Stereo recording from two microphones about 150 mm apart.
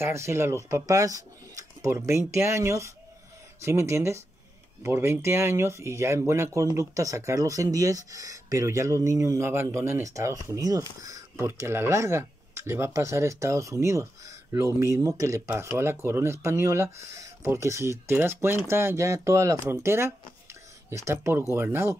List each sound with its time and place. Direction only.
0.0 s speech: 20° right (ahead or behind)